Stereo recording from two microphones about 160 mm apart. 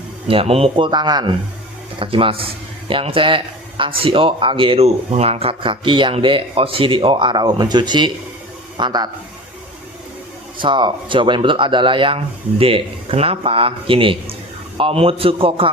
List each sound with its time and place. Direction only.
0.3 s a man's voice: 35° right (ahead or behind)
10.6 s a man's voice: 30° right (ahead or behind)